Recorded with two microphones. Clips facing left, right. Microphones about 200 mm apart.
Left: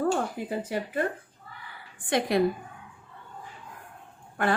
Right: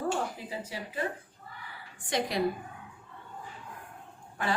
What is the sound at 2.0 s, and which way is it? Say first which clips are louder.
Speech: left 6 dB; 55° left (ahead or behind).